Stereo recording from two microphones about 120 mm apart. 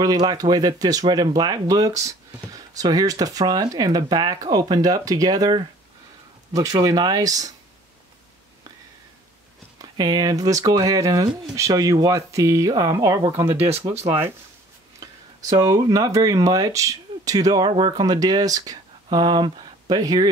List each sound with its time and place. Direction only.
0.0 s speech: 35° right (ahead or behind)
9.8 s speech: 35° right (ahead or behind)
15.5 s speech: 30° right (ahead or behind)